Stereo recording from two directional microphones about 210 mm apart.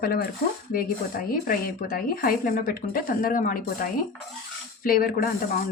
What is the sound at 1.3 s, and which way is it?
Speech, 45° left (ahead or behind).